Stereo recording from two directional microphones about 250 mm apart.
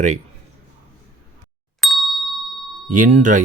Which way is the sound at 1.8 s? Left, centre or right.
Centre.